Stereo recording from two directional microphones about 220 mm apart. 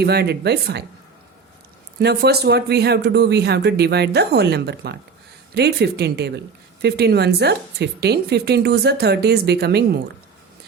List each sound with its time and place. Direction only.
0.0 s speech: 50° right (ahead or behind)
2.0 s speech: 50° right (ahead or behind)